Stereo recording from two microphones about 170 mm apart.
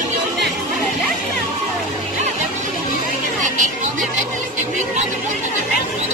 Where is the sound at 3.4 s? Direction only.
50° right (ahead or behind).